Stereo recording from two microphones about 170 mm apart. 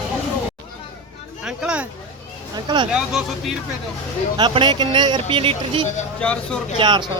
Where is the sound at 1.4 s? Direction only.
5° right (ahead or behind).